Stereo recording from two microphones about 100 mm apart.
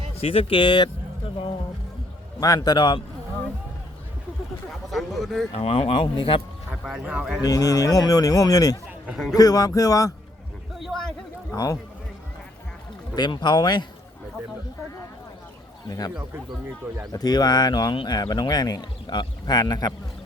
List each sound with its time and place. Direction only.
0.2 s speech: 80° left; by 0.9 s 55° left (ahead or behind)
2.4 s speech: 40° left (ahead or behind)
4.9 s speech: centre (ahead or behind)
5.5 s speech: 70° left (ahead or behind)
6.8 s speech: 10° right (ahead or behind)
7.4 s speech: 35° left (ahead or behind)
10.8 s a sound: centre (ahead or behind)
11.5 s speech: 35° left (ahead or behind)
13.1 s speech: 50° left (ahead or behind)
15.9 s speech: 40° left (ahead or behind)